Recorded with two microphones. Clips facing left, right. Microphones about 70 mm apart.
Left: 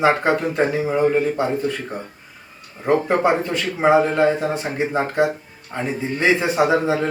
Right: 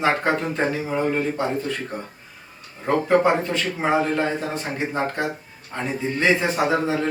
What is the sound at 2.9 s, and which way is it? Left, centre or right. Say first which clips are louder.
Speech: left 1 dB; centre.